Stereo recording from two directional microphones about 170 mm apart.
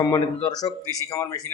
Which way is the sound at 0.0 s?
20° left (ahead or behind).